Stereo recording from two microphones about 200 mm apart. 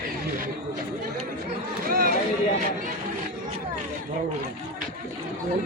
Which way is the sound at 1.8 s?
45° right (ahead or behind).